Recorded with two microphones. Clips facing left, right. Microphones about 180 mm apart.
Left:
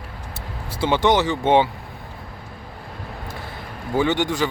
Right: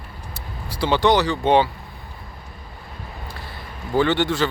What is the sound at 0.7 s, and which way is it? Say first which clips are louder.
Speech: even; 20° left (ahead or behind).